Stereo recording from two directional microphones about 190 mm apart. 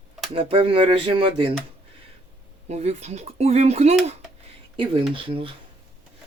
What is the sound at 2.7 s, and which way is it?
Speech, 35° right (ahead or behind).